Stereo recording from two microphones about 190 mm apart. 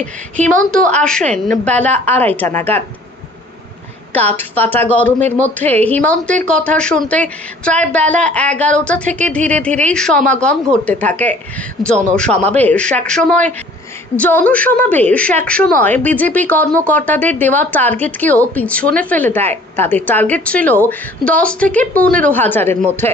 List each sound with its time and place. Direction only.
1.3 s a woman's voice: 5° left (ahead or behind)
4.1 s a woman's voice: 10° left (ahead or behind)